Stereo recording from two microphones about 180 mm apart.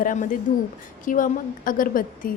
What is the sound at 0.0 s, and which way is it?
A woman's voice, 45° left (ahead or behind).